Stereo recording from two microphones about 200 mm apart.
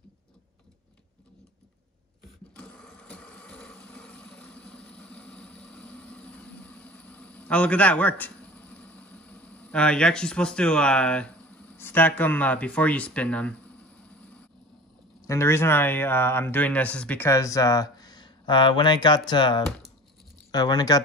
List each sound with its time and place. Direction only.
2.5 s sewing machine: 5° left (ahead or behind)
15.2 s speech: 15° left (ahead or behind)